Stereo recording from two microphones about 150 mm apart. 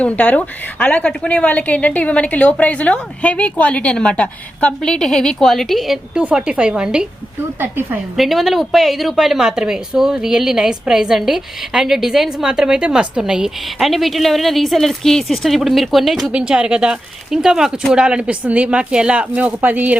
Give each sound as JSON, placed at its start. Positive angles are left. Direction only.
{"t": 0.0, "sound": "a woman's voice", "side_deg": 10}
{"t": 8.1, "sound": "a woman's voice", "side_deg": 0}